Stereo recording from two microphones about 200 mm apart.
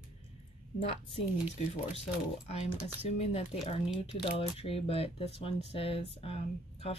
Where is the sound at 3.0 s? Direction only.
35° left (ahead or behind).